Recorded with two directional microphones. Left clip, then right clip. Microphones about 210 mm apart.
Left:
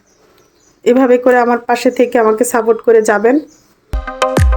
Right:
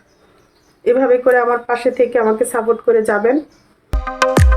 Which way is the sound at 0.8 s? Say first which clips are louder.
Left 3 dB; 50° left (ahead or behind).